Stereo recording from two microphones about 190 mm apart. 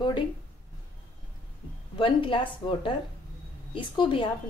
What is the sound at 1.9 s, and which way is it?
A woman's voice, 25° left (ahead or behind).